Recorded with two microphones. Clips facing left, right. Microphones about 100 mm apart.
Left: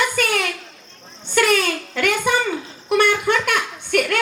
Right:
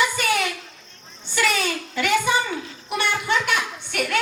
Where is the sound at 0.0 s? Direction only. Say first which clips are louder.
Left 1 dB; 50° left (ahead or behind).